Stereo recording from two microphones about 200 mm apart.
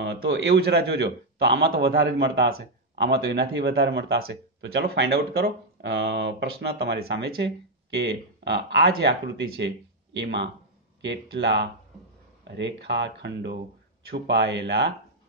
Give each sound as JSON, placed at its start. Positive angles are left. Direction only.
{"t": 0.0, "sound": "a man's voice", "side_deg": -60}
{"t": 10.1, "sound": "a man's voice", "side_deg": -60}